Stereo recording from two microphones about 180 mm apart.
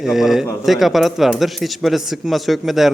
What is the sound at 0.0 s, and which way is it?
A man's voice, centre (ahead or behind).